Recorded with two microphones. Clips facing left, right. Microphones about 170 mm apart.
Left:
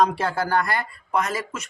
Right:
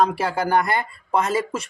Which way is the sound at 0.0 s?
10° right (ahead or behind).